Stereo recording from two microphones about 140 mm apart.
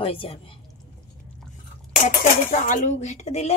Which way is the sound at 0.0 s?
40° left (ahead or behind).